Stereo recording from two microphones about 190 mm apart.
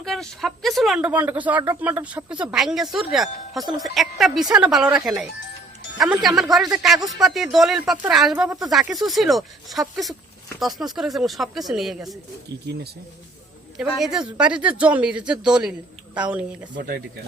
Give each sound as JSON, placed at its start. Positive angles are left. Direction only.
{"t": 0.0, "sound": "speech", "side_deg": 0}
{"t": 13.7, "sound": "speech", "side_deg": 0}
{"t": 16.7, "sound": "speech", "side_deg": -50}